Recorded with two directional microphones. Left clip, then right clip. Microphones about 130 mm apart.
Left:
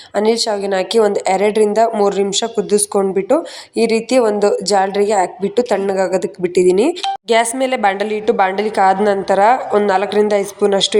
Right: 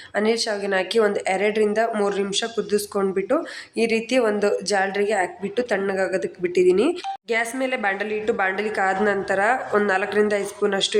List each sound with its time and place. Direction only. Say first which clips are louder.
0.1 s a woman's voice: left 7 dB; 35° left (ahead or behind)
7.3 s a woman's voice: left 9 dB; 55° left (ahead or behind); by 10.9 s 35° left (ahead or behind)